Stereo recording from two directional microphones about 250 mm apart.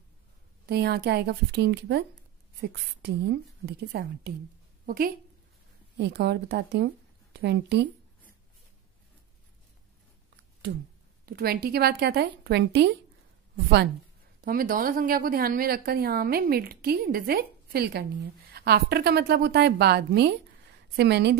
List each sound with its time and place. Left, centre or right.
0.7 s a woman's voice: right
11.2 s a woman's voice: right
14.4 s a woman's voice: right